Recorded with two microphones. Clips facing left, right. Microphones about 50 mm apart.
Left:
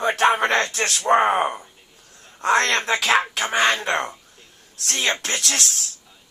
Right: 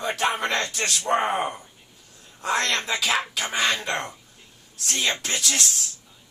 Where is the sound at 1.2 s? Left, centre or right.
Left.